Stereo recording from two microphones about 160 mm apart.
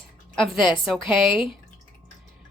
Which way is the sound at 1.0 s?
30° left (ahead or behind).